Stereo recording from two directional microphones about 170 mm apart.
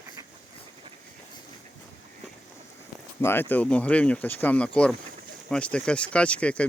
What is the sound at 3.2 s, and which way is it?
Speech, 10° left (ahead or behind).